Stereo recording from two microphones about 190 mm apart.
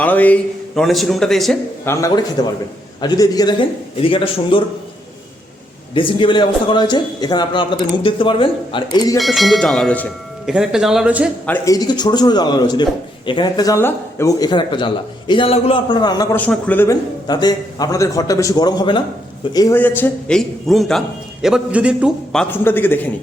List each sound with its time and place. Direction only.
0.0 s a man's voice: 10° left (ahead or behind)
1.8 s a man's voice: 15° left (ahead or behind)
5.9 s a man's voice: 25° left (ahead or behind)
9.1 s a man's voice: centre (ahead or behind)
11.4 s a man's voice: 15° left (ahead or behind)